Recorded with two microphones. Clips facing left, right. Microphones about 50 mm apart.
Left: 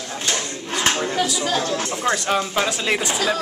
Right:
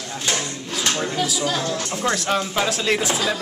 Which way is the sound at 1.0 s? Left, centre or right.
Centre.